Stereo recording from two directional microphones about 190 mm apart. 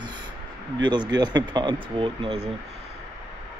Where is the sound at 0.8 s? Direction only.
25° right (ahead or behind).